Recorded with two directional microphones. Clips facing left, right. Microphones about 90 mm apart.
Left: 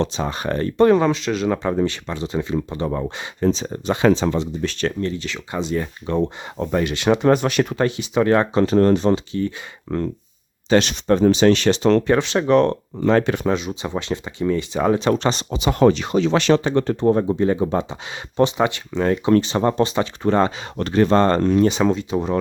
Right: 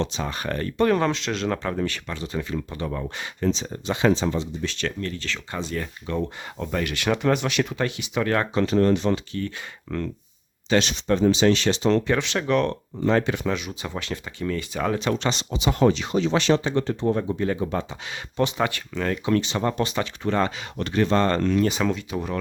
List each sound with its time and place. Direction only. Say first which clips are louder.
0.0 s speech: left 5 dB; 30° left (ahead or behind)
0.9 s speech: left 5 dB; 10° left (ahead or behind)
1.6 s speech: left 6 dB; 20° left (ahead or behind); by 4.9 s 45° left (ahead or behind)
4.9 s speech: left 5 dB; 20° left (ahead or behind)
6.1 s speech: left 7 dB; 30° left (ahead or behind)
8.6 s speech: left 5 dB; 35° left (ahead or behind)
9.9 s speech: left 5 dB; 25° left (ahead or behind)
10.8 s speech: left 4 dB; 55° left (ahead or behind)
12.0 s speech: left 6 dB; 35° left (ahead or behind)
13.1 s speech: left 4 dB; 55° left (ahead or behind)
13.5 s speech: left 6 dB; 25° left (ahead or behind); by 16.1 s 55° left (ahead or behind)
16.1 s speech: left 4 dB; 75° left (ahead or behind); by 17.2 s 50° left (ahead or behind)
17.2 s speech: left 6 dB; 30° left (ahead or behind)